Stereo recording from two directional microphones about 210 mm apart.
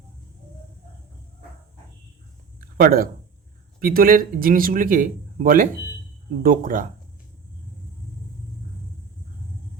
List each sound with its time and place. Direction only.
2.7 s speech: 45° right (ahead or behind)